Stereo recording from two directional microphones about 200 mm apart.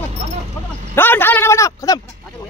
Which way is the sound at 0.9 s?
10° left (ahead or behind).